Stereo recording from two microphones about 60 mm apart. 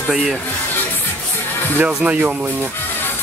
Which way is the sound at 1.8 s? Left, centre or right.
Right.